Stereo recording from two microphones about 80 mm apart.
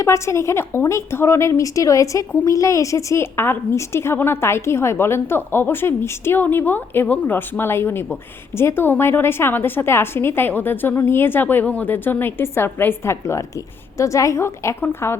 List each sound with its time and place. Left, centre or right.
0.0 s a woman's voice: left